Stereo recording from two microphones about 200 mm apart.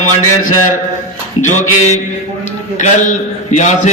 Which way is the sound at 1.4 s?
35° left (ahead or behind).